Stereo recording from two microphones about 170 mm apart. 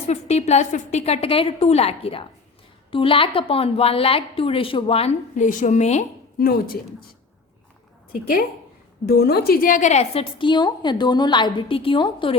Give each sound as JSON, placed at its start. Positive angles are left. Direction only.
{"t": 0.1, "sound": "a woman's voice", "side_deg": 40}
{"t": 6.4, "sound": "a woman's voice", "side_deg": 60}
{"t": 8.1, "sound": "a woman's voice", "side_deg": 60}